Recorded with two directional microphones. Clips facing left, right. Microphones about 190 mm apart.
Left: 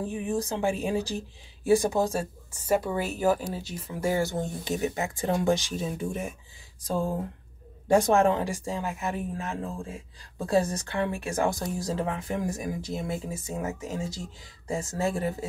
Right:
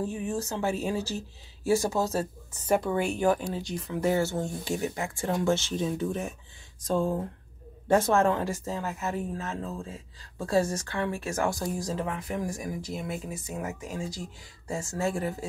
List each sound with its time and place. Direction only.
0.0 s speech: 15° left (ahead or behind)
12.0 s speech: 30° left (ahead or behind)